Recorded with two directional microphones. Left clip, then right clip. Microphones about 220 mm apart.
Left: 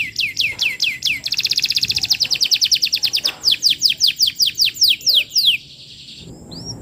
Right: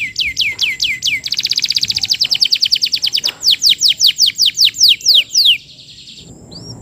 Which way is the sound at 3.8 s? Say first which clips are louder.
Right 5 dB; 20° right (ahead or behind).